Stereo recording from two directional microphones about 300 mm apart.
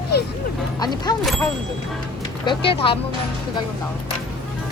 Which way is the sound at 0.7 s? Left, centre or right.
Centre.